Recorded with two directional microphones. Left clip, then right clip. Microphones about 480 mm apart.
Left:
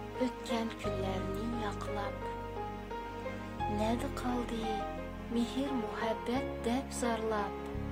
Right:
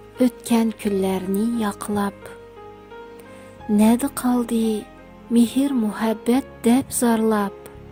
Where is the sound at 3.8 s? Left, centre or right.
Centre.